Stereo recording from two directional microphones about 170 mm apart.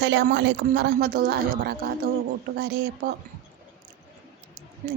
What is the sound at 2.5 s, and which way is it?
Speech, 75° right (ahead or behind).